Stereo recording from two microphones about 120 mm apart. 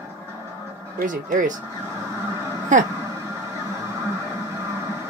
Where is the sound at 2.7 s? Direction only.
90° right.